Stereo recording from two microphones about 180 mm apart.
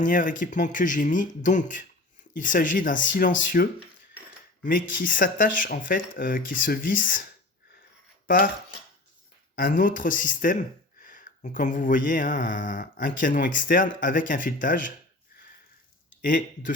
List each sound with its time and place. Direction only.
0.0 s speech: 50° left (ahead or behind)
9.6 s speech: 50° left (ahead or behind)
16.2 s speech: 50° left (ahead or behind)